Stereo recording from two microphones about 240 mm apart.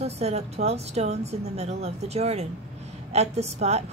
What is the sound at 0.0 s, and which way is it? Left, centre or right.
A woman's voice, right.